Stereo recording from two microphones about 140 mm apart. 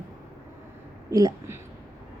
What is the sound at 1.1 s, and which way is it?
Speech, 25° right (ahead or behind).